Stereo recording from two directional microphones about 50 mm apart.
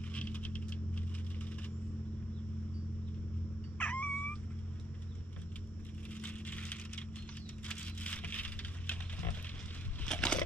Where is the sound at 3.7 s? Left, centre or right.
Left.